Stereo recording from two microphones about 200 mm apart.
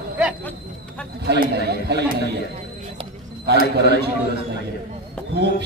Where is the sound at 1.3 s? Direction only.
55° right (ahead or behind).